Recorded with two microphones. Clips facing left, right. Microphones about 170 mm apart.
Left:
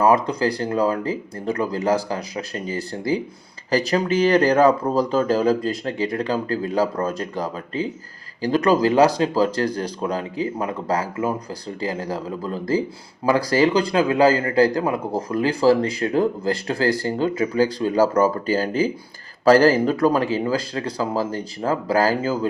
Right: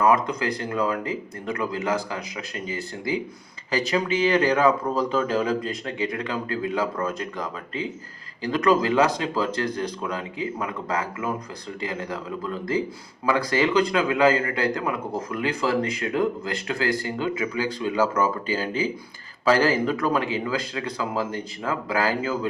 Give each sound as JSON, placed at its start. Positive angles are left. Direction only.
{"t": 0.0, "sound": "a man's voice", "side_deg": 30}